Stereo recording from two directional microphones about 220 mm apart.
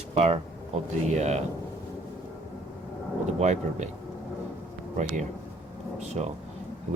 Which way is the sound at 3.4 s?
30° right (ahead or behind).